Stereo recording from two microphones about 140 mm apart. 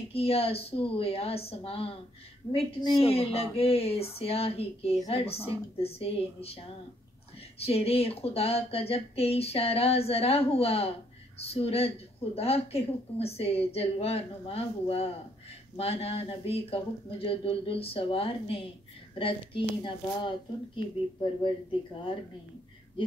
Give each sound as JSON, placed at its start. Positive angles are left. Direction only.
{"t": 0.1, "sound": "speech", "side_deg": 45}
{"t": 3.0, "sound": "speech", "side_deg": 45}